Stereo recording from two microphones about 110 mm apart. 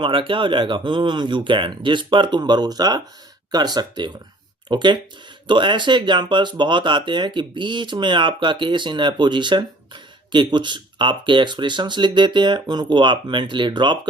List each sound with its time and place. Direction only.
0.0 s speech: 50° right (ahead or behind)